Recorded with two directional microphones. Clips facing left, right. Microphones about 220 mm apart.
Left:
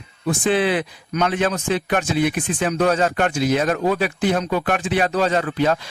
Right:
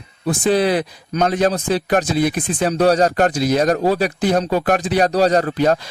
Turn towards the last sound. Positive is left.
turn(degrees=-40)  # may be behind; listen again after turning